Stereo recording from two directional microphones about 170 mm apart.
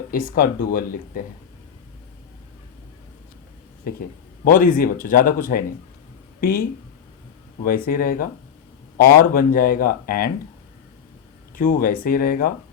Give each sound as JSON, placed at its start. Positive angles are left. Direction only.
{"t": 0.1, "sound": "speech", "side_deg": 55}
{"t": 4.4, "sound": "speech", "side_deg": 55}
{"t": 7.9, "sound": "speech", "side_deg": 55}
{"t": 11.5, "sound": "speech", "side_deg": 60}